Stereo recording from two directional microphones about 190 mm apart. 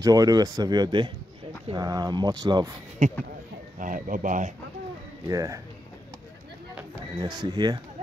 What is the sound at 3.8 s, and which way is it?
Speech, 45° right (ahead or behind).